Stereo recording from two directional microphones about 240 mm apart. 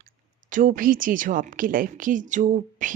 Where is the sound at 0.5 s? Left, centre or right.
Right.